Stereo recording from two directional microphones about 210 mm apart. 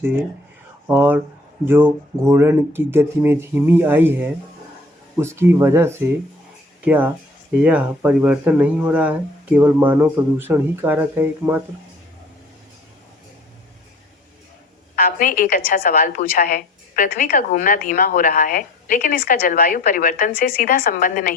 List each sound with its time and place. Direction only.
0.9 s speech: 10° right (ahead or behind)
14.9 s a woman's voice: 40° left (ahead or behind)